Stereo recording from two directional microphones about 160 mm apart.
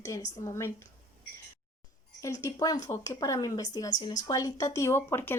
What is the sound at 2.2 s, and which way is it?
A woman's voice, 20° left (ahead or behind).